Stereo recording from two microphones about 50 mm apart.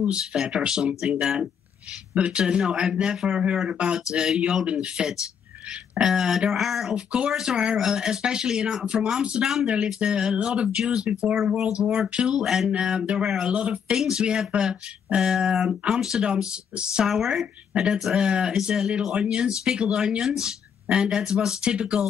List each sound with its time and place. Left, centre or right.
0.1 s speech: centre
2.1 s speech: right; by 6.9 s centre
6.9 s speech: centre
11.3 s speech: centre
12.7 s speech: centre
17.1 s speech: centre
18.1 s speech: centre